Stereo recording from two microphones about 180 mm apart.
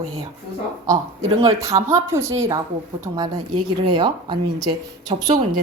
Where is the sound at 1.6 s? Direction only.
15° right (ahead or behind).